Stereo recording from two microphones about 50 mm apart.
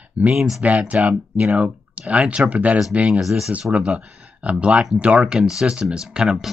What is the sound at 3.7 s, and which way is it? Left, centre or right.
Speech, right.